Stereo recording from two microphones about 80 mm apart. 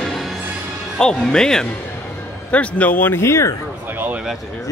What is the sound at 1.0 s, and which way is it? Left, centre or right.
A man's voice, centre.